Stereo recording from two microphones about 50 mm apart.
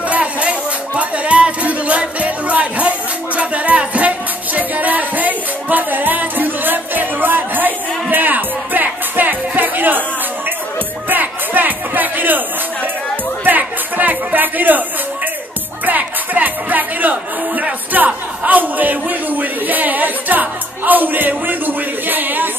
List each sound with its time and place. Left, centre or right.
0.1 s music: right
11.1 s music: right
13.4 s music: right
15.8 s music: right
17.9 s speech: right